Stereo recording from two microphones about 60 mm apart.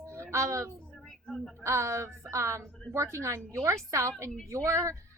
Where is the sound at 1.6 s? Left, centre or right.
Right.